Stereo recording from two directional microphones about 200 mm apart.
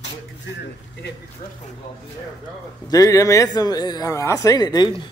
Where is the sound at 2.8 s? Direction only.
15° left (ahead or behind).